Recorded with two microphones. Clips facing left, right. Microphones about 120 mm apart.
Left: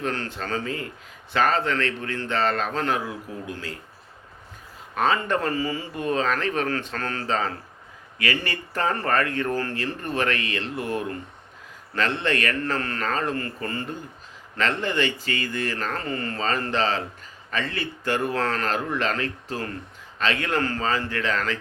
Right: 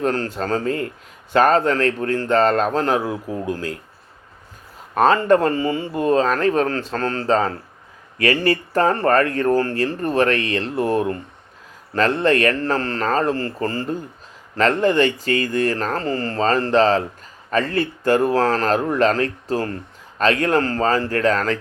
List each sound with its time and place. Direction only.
0.0 s speech: 40° right (ahead or behind)
4.9 s speech: 40° right (ahead or behind)